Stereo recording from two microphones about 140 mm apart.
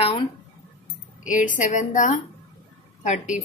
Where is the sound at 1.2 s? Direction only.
65° left (ahead or behind).